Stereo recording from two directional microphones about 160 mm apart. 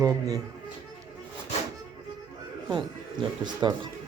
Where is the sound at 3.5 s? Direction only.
25° right (ahead or behind).